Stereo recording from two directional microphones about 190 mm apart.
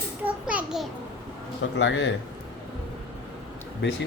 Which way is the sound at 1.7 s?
70° left (ahead or behind).